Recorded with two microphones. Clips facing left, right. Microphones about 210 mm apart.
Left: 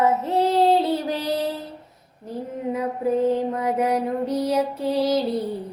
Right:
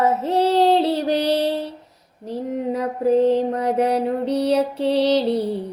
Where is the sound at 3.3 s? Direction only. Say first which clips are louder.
Right 3 dB; 35° right (ahead or behind).